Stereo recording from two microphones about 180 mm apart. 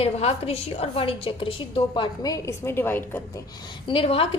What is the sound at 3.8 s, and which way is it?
Speech, 30° left (ahead or behind).